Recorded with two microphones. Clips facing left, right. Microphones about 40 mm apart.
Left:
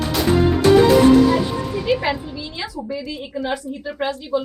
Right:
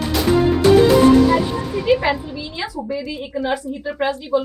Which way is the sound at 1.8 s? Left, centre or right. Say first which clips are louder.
Right 4 dB; centre.